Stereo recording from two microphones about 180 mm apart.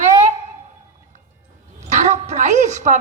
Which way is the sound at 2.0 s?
40° right (ahead or behind).